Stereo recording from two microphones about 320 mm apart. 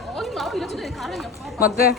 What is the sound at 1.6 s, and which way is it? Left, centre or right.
Speech, left.